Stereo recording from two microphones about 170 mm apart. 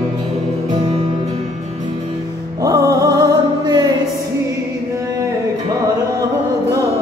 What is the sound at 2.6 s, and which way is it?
Music, 20° right (ahead or behind).